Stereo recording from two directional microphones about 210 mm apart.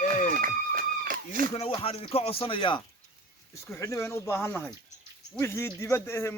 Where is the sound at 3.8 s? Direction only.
15° left (ahead or behind).